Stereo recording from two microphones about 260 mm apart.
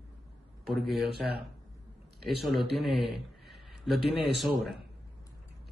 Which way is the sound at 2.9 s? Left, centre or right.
Centre.